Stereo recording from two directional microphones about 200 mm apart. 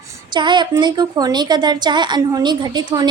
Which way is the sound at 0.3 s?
25° right (ahead or behind).